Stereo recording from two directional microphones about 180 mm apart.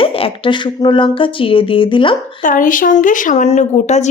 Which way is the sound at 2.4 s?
50° left (ahead or behind).